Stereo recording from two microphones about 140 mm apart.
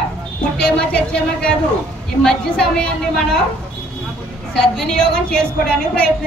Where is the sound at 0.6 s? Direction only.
5° left (ahead or behind).